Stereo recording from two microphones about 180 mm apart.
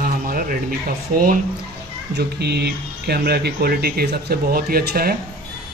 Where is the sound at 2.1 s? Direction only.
65° right (ahead or behind).